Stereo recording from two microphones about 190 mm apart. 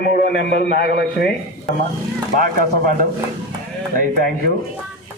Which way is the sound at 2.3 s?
50° right (ahead or behind).